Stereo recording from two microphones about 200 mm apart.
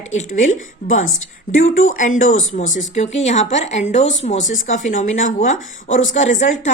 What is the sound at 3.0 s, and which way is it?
A woman's voice, 35° left (ahead or behind).